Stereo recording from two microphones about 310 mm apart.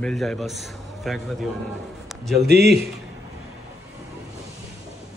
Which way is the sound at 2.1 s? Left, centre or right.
Centre.